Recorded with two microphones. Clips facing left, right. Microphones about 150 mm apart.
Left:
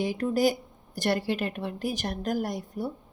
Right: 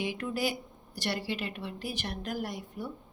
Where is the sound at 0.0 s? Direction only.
40° left (ahead or behind).